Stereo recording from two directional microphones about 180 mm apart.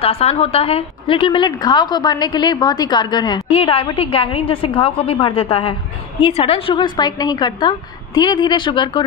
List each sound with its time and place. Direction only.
0.0 s a woman's voice: 35° left (ahead or behind)